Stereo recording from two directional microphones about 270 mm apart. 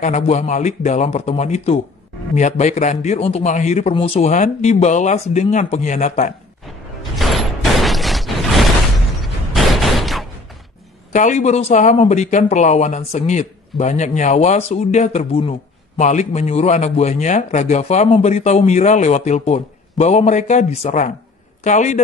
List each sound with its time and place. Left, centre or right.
0.0 s speech: left
7.0 s a sound: centre
11.1 s speech: left